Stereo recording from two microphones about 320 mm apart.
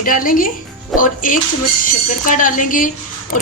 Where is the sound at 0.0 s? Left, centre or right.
Left.